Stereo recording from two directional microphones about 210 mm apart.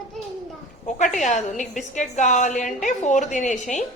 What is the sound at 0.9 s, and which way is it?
A woman's voice, 35° left (ahead or behind).